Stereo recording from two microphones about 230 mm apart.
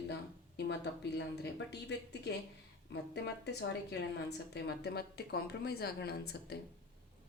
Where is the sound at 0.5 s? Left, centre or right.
Left.